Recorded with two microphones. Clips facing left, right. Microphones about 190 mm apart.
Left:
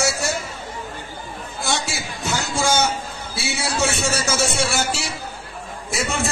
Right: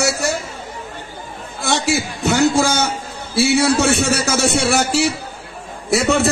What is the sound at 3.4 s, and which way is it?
A man's voice, 65° right (ahead or behind).